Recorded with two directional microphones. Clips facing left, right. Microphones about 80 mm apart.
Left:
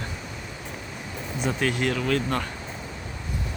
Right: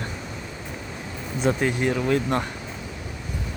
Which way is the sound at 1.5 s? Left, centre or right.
Right.